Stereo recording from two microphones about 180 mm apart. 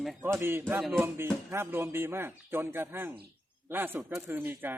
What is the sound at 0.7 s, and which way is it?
Speech, centre (ahead or behind).